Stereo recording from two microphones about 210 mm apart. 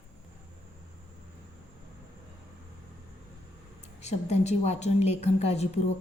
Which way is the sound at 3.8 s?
30° left (ahead or behind).